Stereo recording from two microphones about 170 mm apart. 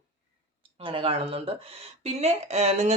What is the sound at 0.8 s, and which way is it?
Speech, 30° right (ahead or behind).